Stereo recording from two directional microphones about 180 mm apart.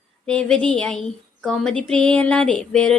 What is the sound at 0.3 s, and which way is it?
A woman's voice, 5° left (ahead or behind).